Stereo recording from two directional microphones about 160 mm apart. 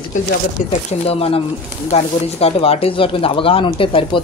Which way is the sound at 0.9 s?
40° left (ahead or behind).